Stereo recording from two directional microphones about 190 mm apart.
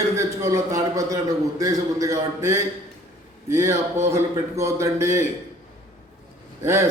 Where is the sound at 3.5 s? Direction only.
15° right (ahead or behind).